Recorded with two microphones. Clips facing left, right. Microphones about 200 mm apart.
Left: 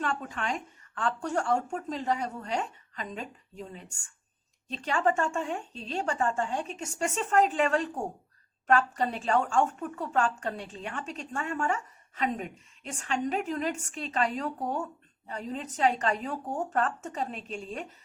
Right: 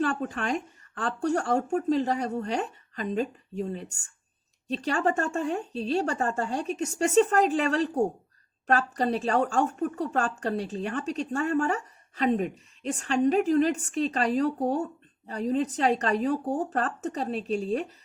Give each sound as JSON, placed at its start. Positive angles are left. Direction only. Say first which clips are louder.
{"t": 0.0, "sound": "a woman's voice", "louder": "right 5 dB", "side_deg": -35}